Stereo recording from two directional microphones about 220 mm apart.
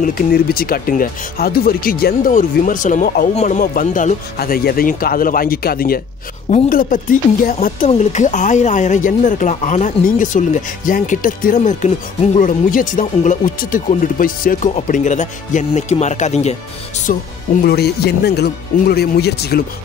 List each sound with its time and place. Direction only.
0.0 s speech: 45° left (ahead or behind)